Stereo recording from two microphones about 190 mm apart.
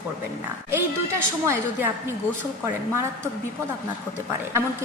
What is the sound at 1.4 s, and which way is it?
Speech, 15° right (ahead or behind).